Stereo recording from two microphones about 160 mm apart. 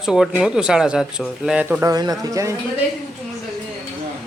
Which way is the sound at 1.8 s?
20° right (ahead or behind).